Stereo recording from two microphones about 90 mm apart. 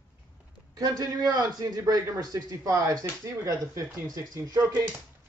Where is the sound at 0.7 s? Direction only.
45° right (ahead or behind); by 4.6 s 30° right (ahead or behind).